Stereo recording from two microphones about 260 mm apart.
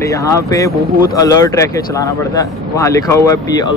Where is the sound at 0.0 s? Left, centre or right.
Centre.